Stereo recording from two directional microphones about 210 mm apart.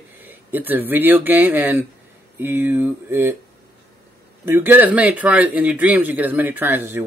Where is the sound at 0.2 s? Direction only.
10° right (ahead or behind).